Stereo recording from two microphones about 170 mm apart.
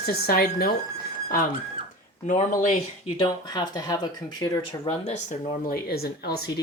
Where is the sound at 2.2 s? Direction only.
45° left (ahead or behind).